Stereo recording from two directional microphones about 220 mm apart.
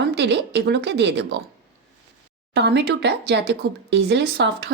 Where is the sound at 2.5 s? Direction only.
50° right (ahead or behind).